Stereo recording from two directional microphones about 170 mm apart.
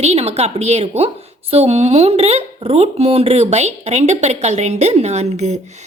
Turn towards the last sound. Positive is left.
turn(degrees=-40)  # may be behind; listen again after turning